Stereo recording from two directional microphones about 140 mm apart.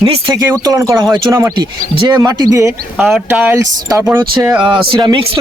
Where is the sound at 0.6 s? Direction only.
25° right (ahead or behind); by 4.7 s 10° right (ahead or behind).